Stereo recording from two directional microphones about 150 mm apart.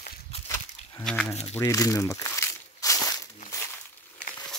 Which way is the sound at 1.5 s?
20° left (ahead or behind).